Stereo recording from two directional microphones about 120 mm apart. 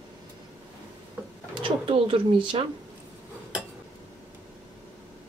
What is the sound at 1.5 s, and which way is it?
Speech, 45° right (ahead or behind).